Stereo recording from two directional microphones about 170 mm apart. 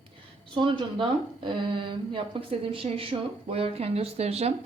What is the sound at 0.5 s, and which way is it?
Speech, 30° right (ahead or behind).